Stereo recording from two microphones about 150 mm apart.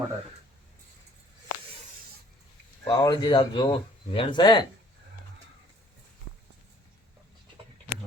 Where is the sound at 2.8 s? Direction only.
25° left (ahead or behind).